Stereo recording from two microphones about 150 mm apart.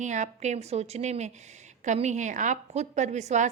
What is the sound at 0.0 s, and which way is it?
A woman's voice, 50° right (ahead or behind).